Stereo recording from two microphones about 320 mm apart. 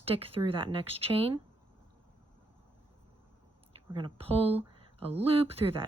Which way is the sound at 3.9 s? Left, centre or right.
Centre.